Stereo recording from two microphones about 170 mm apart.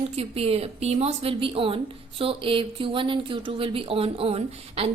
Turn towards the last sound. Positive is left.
turn(degrees=-35)  # may be behind; listen again after turning